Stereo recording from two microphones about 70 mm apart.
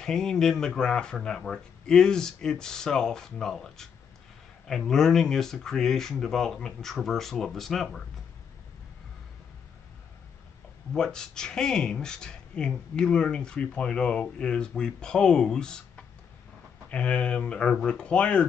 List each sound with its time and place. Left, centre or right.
0.0 s speech: centre
10.9 s speech: centre